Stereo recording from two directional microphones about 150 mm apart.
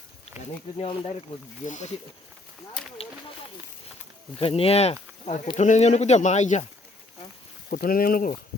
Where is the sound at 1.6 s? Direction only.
55° left (ahead or behind).